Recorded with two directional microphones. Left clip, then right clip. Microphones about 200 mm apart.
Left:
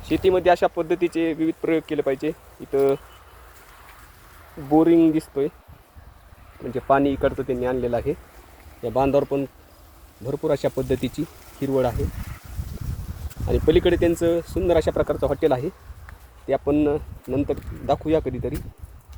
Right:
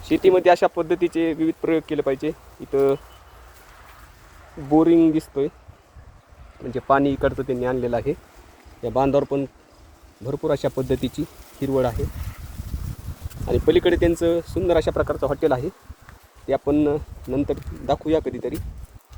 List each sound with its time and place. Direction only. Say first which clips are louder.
0.0 s speech: right 2 dB; 55° right (ahead or behind)
0.3 s speech: right 1 dB; 15° right (ahead or behind)
0.8 s speech: right 1 dB; 5° right (ahead or behind)
4.7 s speech: even; centre (ahead or behind)
6.7 s speech: even; 5° left (ahead or behind)
13.5 s speech: right 1 dB; centre (ahead or behind)